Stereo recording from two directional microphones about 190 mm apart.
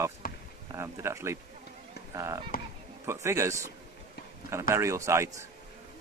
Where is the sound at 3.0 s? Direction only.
15° right (ahead or behind).